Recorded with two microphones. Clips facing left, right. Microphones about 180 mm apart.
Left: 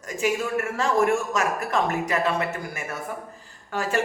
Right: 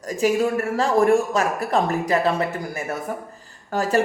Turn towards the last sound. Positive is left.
turn(degrees=-40)  # may be behind; listen again after turning